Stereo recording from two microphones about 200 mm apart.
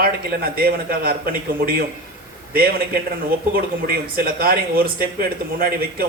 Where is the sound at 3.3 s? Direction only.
50° right (ahead or behind).